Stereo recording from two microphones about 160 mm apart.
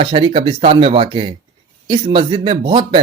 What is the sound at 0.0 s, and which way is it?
Speech, 30° right (ahead or behind).